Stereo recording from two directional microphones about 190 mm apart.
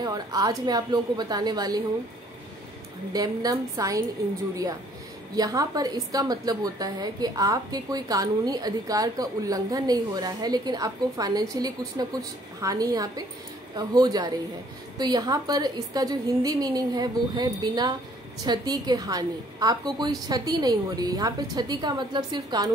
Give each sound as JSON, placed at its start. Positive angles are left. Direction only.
{"t": 0.0, "sound": "a woman's voice", "side_deg": -20}
{"t": 3.1, "sound": "a woman's voice", "side_deg": -20}
{"t": 5.3, "sound": "a woman's voice", "side_deg": -20}